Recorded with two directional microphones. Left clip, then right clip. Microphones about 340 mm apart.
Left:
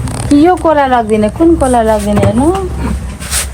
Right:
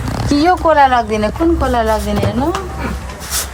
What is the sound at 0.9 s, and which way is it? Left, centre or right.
Speech, left.